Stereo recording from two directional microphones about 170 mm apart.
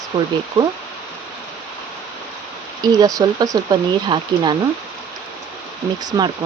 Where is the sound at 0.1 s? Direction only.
30° right (ahead or behind).